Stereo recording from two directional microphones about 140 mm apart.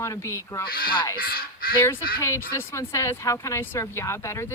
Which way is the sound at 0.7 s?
90° left.